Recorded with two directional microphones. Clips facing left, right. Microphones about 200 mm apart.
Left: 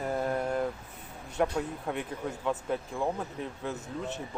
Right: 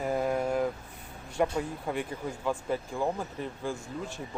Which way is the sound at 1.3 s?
Centre (ahead or behind).